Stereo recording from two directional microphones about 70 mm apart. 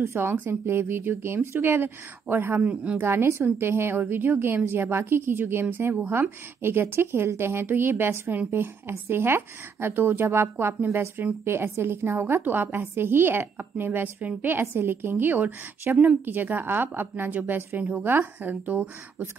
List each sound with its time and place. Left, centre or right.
0.0 s a woman's voice: right; by 3.0 s centre
3.0 s a woman's voice: right